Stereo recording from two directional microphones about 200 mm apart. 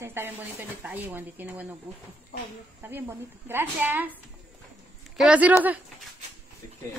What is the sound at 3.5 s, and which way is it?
Speech, 10° right (ahead or behind).